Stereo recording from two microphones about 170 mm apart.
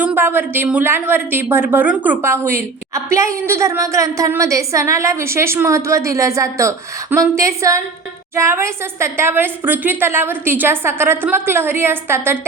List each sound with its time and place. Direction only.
0.0 s a woman's voice: 15° right (ahead or behind)